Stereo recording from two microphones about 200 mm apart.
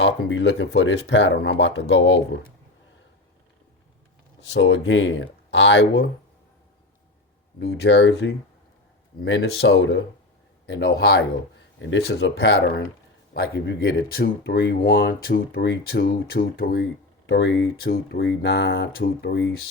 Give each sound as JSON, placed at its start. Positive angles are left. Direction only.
{"t": 0.0, "sound": "speech", "side_deg": 65}
{"t": 4.4, "sound": "speech", "side_deg": 70}
{"t": 7.6, "sound": "speech", "side_deg": 60}
{"t": 17.2, "sound": "speech", "side_deg": 65}